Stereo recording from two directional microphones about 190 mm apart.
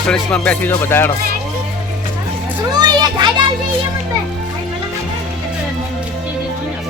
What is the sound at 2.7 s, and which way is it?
Children playing, 20° right (ahead or behind).